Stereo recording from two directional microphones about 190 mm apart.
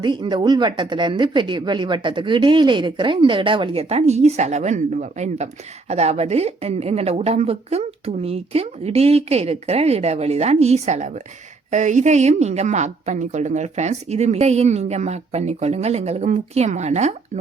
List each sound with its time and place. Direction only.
0.0 s a woman's voice: 25° right (ahead or behind)